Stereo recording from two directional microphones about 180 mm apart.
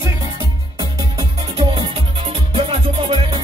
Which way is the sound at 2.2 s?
30° right (ahead or behind).